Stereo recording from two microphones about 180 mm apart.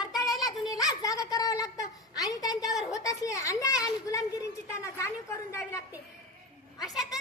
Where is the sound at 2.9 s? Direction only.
20° left (ahead or behind).